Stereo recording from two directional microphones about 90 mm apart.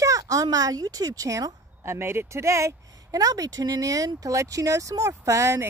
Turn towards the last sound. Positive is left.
turn(degrees=-35)  # may be behind; listen again after turning